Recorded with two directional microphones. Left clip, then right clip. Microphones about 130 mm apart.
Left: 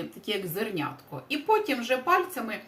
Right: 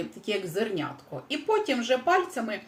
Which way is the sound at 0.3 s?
20° left (ahead or behind).